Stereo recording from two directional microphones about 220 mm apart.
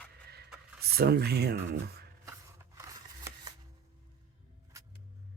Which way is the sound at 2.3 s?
15° right (ahead or behind).